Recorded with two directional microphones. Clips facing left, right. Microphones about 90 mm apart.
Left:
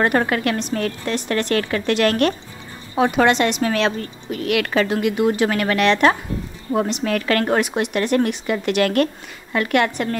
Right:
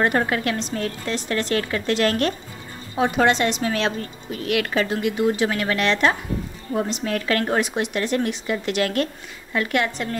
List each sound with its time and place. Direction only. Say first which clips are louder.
0.0 s a woman's voice: left 2 dB; 65° left (ahead or behind)
3.0 s a woman's voice: left 3 dB; 80° left
4.5 s a woman's voice: left 3 dB; 85° left; by 6.1 s 65° left (ahead or behind)
6.9 s a woman's voice: left 3 dB; 75° left (ahead or behind); by 10.0 s 60° left (ahead or behind)